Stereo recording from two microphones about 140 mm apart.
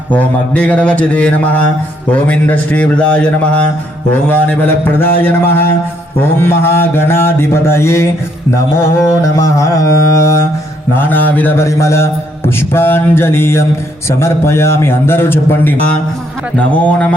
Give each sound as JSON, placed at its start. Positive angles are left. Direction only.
{"t": 0.1, "sound": "a man's voice", "side_deg": 10}
{"t": 8.7, "sound": "music", "side_deg": 20}
{"t": 10.9, "sound": "a man's voice", "side_deg": 10}